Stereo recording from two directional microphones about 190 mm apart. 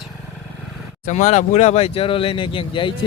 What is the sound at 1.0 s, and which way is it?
Speech, 40° left (ahead or behind).